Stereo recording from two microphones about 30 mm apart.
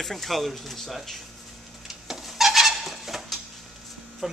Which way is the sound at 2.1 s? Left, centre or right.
Centre.